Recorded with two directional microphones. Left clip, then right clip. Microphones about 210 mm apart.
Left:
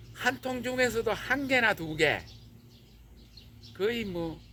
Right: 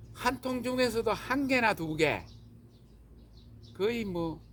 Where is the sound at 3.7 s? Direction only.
40° right (ahead or behind).